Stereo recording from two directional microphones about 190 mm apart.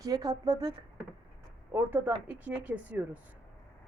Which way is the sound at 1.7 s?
10° right (ahead or behind).